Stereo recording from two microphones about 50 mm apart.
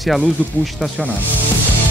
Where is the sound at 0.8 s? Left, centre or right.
Centre.